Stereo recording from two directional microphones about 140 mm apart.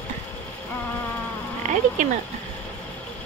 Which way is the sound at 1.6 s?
60° right (ahead or behind).